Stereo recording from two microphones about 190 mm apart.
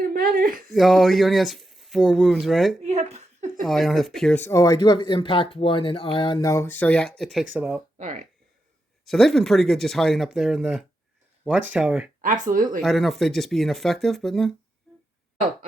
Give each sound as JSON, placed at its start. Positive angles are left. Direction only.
{"t": 0.0, "sound": "a sound", "side_deg": -50}
{"t": 0.7, "sound": "speech", "side_deg": 0}
{"t": 2.8, "sound": "a sound", "side_deg": -35}
{"t": 3.6, "sound": "speech", "side_deg": 0}
{"t": 7.9, "sound": "speech", "side_deg": -40}
{"t": 9.0, "sound": "speech", "side_deg": 0}
{"t": 12.2, "sound": "speech", "side_deg": -45}
{"t": 12.8, "sound": "speech", "side_deg": 0}
{"t": 14.9, "sound": "a sound", "side_deg": 0}